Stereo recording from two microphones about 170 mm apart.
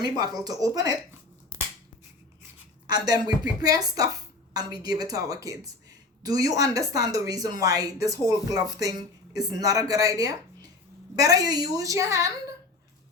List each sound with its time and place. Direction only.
0.0 s speech: 25° right (ahead or behind)
2.8 s speech: 25° right (ahead or behind)